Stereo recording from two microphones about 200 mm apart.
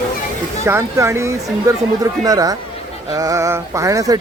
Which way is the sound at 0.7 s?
15° right (ahead or behind).